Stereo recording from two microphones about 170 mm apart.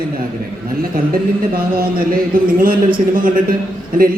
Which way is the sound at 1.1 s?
60° right (ahead or behind).